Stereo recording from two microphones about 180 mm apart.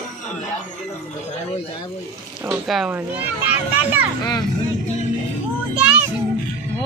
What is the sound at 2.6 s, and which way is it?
A child's voice, 5° right (ahead or behind).